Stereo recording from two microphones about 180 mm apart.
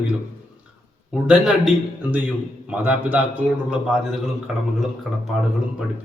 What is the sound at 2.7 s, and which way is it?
A man's voice, 10° right (ahead or behind).